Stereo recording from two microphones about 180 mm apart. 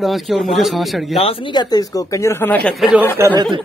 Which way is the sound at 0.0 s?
Centre (ahead or behind).